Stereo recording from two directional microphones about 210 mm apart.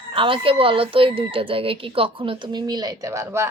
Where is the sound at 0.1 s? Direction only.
25° right (ahead or behind).